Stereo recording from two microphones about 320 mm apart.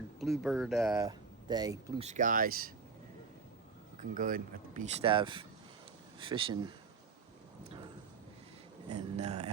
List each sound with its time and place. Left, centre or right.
0.2 s speech: centre; by 2.7 s right
4.1 s speech: right
9.1 s speech: right